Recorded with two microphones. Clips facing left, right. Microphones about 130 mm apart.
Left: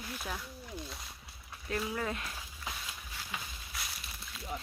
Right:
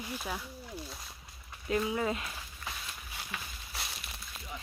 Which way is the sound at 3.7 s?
30° right (ahead or behind).